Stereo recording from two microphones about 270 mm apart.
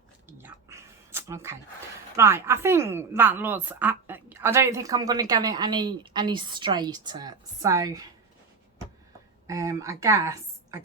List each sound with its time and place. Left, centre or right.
0.3 s a sound: centre
2.1 s a woman's voice: centre
9.5 s a woman's voice: centre